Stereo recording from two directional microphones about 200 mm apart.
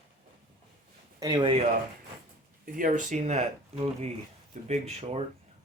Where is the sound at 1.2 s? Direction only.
20° right (ahead or behind).